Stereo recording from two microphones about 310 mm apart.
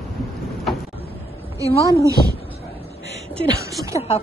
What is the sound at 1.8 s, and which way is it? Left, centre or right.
Speech, centre.